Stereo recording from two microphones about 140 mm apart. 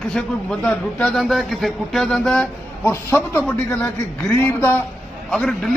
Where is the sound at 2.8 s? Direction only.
20° left (ahead or behind).